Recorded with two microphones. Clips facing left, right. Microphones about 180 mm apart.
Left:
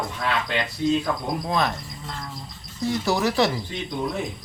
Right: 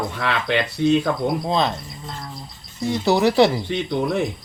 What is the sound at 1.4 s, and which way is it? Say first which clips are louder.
Speech: right 3 dB; 25° right (ahead or behind).